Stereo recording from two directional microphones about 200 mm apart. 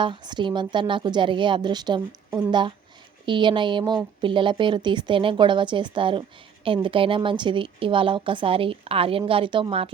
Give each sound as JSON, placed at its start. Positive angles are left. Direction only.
{"t": 0.0, "sound": "a woman's voice", "side_deg": -25}